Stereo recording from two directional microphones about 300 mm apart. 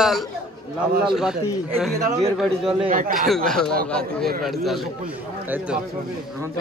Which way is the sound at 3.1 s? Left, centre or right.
Centre.